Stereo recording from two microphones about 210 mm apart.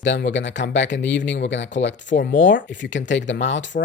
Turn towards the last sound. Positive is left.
turn(degrees=60)  # may be behind; listen again after turning